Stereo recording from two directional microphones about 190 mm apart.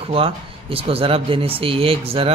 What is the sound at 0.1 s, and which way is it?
Speech, 30° right (ahead or behind).